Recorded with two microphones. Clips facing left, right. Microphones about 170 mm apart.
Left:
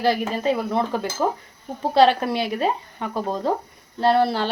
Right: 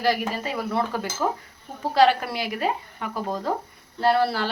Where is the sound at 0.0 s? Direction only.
25° left (ahead or behind).